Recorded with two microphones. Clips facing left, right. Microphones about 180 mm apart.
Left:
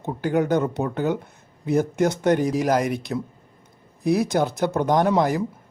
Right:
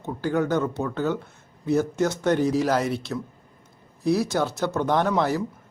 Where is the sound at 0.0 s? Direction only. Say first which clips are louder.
Left 2 dB; 15° left (ahead or behind).